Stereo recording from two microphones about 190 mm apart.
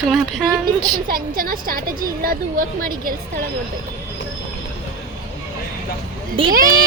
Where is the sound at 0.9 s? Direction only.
45° right (ahead or behind).